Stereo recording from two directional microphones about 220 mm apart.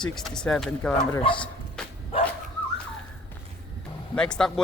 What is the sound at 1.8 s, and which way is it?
Bow-wow, 5° left (ahead or behind).